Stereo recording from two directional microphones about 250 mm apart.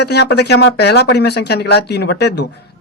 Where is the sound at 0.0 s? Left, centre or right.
Left.